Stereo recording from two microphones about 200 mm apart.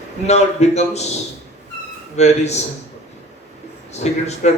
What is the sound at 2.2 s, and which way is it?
Speech, 35° left (ahead or behind).